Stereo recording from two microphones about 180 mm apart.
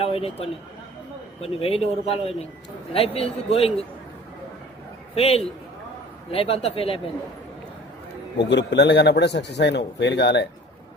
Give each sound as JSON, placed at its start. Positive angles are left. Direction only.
{"t": 0.0, "sound": "a man's voice", "side_deg": 30}
{"t": 5.1, "sound": "a man's voice", "side_deg": 35}
{"t": 8.4, "sound": "a man's voice", "side_deg": 75}